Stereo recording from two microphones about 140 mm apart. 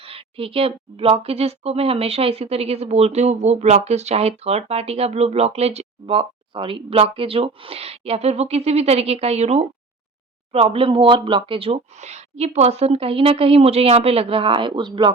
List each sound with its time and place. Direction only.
0.0 s speech: 40° right (ahead or behind)